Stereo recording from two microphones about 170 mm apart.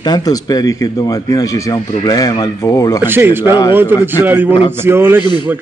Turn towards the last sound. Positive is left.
turn(degrees=25)  # may be behind; listen again after turning